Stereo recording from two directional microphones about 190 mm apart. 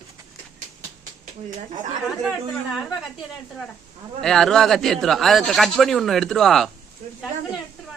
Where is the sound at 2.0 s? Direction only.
Centre (ahead or behind).